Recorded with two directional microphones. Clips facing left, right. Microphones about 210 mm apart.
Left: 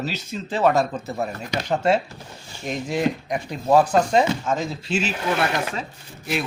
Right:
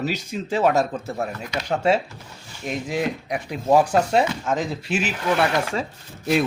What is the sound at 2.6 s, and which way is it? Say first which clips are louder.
Speech: left 2 dB; 5° right (ahead or behind).